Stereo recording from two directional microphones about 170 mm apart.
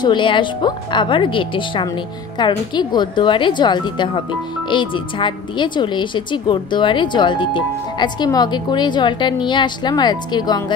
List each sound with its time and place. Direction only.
0.0 s speech: 30° left (ahead or behind)